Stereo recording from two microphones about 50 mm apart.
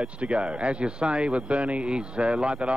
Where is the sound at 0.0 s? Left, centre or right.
Right.